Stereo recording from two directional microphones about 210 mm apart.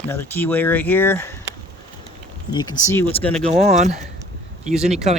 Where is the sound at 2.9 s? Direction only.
10° left (ahead or behind).